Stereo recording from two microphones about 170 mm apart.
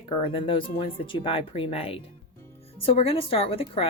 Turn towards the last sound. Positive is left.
turn(degrees=35)  # may be behind; listen again after turning